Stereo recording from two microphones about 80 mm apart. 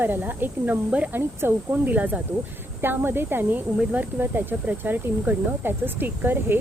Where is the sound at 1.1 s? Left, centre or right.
Right.